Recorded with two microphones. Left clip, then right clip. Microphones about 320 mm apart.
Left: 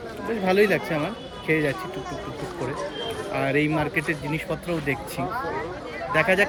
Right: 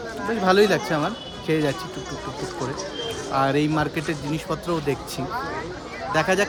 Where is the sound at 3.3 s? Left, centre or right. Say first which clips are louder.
Right 2 dB; centre.